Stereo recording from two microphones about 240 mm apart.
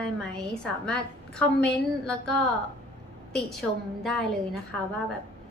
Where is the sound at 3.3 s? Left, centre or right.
Centre.